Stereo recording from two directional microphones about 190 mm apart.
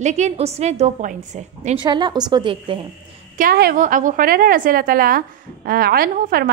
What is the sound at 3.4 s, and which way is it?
A woman's voice, 50° right (ahead or behind).